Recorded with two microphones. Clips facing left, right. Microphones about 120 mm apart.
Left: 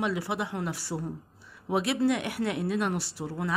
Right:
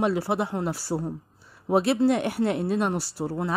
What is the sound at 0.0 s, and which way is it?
A woman's voice, 40° right (ahead or behind).